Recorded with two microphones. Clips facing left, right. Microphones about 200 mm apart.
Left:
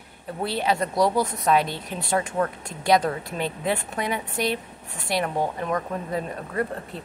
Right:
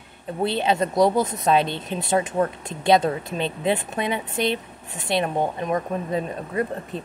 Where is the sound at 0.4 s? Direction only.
25° right (ahead or behind).